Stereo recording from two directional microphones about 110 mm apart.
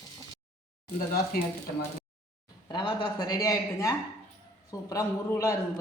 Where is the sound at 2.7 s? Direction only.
45° left (ahead or behind).